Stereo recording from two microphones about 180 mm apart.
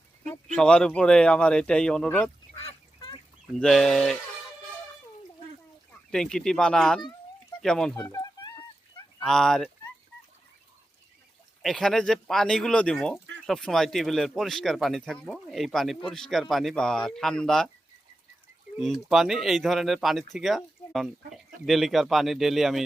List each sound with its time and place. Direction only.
0.5 s speech: 5° left (ahead or behind)
2.6 s goose: 25° left (ahead or behind)
3.6 s speech: 5° left (ahead or behind)
6.1 s speech: 5° left (ahead or behind)
8.0 s speech: 20° left (ahead or behind)
9.2 s speech: centre (ahead or behind)
11.6 s speech: centre (ahead or behind)
18.8 s speech: centre (ahead or behind)